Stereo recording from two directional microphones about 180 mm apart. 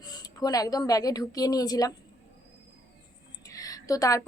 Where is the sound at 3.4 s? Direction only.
20° left (ahead or behind).